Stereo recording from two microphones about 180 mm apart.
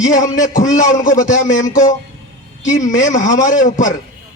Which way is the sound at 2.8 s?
45° left (ahead or behind).